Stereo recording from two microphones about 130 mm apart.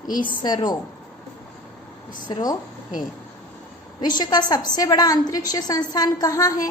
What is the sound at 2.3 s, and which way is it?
Speech, 35° left (ahead or behind).